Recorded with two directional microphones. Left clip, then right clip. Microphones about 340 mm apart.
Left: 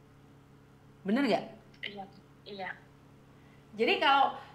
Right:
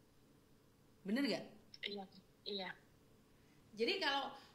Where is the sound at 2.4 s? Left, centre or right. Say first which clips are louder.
Left 4 dB; right.